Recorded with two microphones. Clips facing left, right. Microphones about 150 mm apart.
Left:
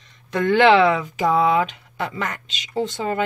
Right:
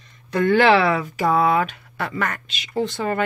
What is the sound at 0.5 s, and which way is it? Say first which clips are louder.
Speech: left 3 dB; 20° left (ahead or behind).